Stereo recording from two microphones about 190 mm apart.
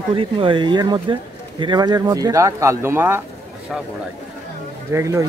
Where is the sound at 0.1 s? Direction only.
25° right (ahead or behind).